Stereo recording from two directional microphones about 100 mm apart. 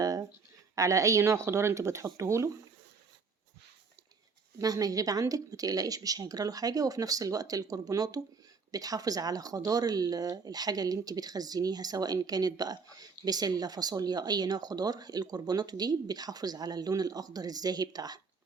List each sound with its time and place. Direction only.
0.0 s a sound: 40° right (ahead or behind)
0.8 s speech: 35° right (ahead or behind)
4.5 s speech: 35° right (ahead or behind)